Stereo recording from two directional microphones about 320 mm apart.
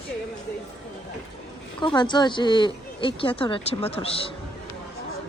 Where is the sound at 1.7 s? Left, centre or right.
Centre.